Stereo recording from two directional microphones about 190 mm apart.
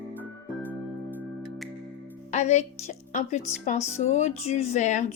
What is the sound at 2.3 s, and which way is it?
Speech, 35° left (ahead or behind).